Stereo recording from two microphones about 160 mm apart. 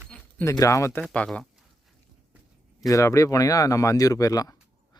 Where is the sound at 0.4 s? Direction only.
20° left (ahead or behind).